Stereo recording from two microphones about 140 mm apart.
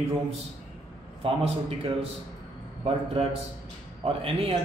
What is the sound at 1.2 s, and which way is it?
Speech, 40° right (ahead or behind).